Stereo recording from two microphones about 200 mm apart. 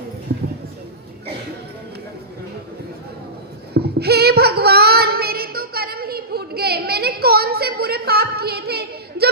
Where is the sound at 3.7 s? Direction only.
55° right (ahead or behind).